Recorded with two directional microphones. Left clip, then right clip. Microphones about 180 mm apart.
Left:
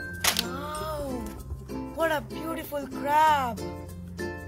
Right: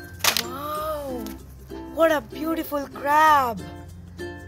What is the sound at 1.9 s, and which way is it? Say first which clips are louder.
Speech: right 7 dB; 45° right (ahead or behind).